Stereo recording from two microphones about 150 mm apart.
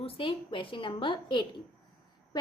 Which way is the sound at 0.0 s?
35° left (ahead or behind).